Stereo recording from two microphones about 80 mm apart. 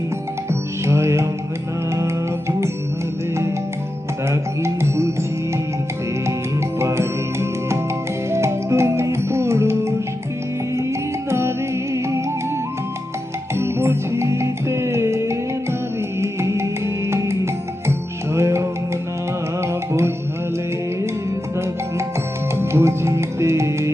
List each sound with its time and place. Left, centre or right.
0.9 s music: right
4.3 s music: right
6.7 s music: right
13.6 s music: right
22.5 s music: right